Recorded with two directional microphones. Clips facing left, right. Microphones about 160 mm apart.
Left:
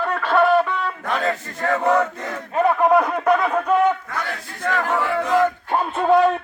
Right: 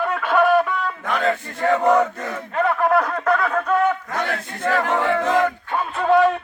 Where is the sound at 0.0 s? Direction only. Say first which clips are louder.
Even; 10° right (ahead or behind).